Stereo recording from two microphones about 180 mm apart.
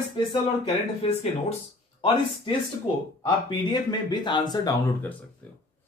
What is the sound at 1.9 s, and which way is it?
Speech, 30° left (ahead or behind).